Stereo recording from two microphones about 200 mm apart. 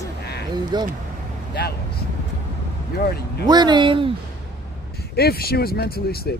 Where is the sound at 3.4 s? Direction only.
20° right (ahead or behind).